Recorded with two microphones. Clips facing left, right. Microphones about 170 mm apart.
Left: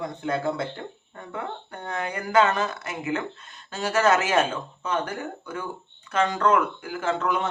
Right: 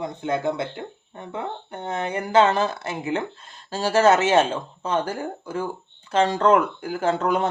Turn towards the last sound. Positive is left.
turn(degrees=-35)  # may be behind; listen again after turning